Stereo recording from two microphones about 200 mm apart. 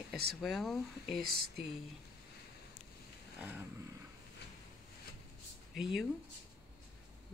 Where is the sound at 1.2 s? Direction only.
50° right (ahead or behind).